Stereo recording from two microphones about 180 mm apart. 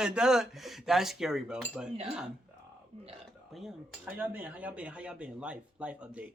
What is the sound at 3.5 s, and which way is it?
Speech, centre (ahead or behind).